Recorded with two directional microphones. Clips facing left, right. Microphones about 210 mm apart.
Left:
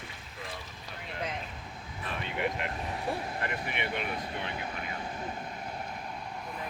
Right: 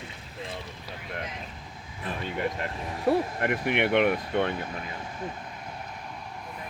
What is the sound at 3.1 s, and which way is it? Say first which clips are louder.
Speech: right 12 dB; 65° right (ahead or behind).